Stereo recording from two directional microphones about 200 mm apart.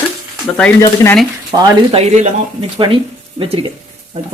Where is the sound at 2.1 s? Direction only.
35° right (ahead or behind).